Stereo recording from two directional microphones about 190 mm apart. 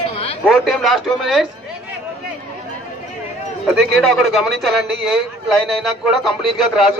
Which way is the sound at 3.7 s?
Centre (ahead or behind).